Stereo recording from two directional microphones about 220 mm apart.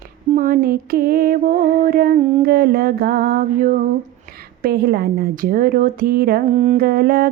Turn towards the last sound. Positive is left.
turn(degrees=-45)  # may be behind; listen again after turning